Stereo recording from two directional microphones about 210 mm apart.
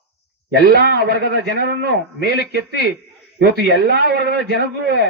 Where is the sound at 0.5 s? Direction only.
50° right (ahead or behind).